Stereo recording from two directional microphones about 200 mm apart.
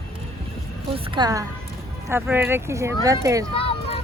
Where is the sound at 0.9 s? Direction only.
20° right (ahead or behind).